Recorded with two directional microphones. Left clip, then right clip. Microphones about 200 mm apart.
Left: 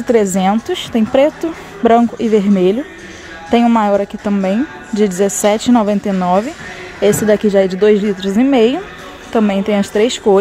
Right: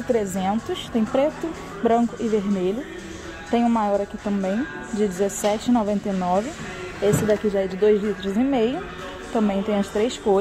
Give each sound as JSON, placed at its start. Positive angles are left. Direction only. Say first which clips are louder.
{"t": 0.1, "sound": "a woman's voice", "louder": "left 10 dB", "side_deg": 15}